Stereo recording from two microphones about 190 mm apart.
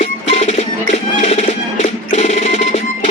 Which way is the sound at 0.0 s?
35° left (ahead or behind).